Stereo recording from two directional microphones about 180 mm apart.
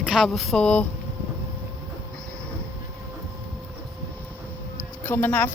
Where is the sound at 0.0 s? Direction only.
Centre (ahead or behind).